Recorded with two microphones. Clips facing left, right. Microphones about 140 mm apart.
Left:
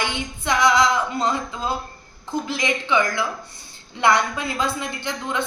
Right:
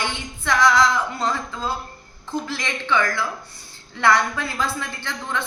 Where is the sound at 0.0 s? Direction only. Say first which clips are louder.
Left 2 dB; 15° left (ahead or behind).